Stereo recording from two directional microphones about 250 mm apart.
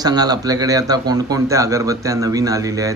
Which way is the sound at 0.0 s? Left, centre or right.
Centre.